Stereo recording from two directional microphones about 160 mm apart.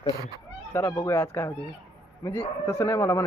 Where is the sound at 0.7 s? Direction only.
15° left (ahead or behind).